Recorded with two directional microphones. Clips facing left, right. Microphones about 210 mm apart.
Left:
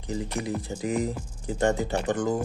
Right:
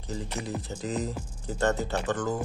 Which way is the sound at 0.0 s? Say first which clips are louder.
Left 4 dB; 15° left (ahead or behind).